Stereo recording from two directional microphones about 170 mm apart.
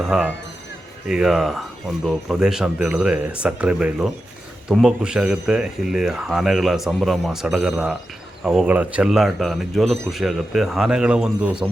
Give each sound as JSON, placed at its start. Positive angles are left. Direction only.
{"t": 0.0, "sound": "speech", "side_deg": -5}